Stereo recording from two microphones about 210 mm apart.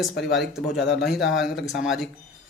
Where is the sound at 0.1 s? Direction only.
55° left (ahead or behind).